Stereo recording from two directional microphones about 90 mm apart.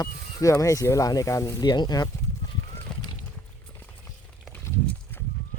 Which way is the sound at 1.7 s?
50° left (ahead or behind).